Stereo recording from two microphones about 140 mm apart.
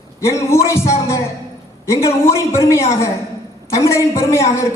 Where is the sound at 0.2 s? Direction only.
20° left (ahead or behind).